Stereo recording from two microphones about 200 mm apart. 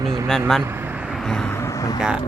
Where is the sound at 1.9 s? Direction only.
5° right (ahead or behind).